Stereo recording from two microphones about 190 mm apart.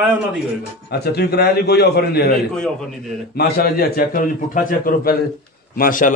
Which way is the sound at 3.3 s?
55° left (ahead or behind).